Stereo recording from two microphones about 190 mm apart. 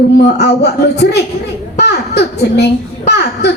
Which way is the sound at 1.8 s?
60° left (ahead or behind).